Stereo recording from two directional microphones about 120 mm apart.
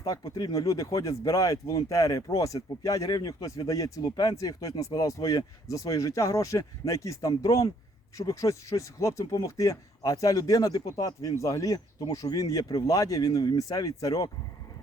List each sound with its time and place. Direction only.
0.0 s speech: 35° left (ahead or behind)